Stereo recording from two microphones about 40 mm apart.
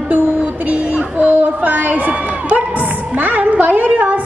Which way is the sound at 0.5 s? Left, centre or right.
Right.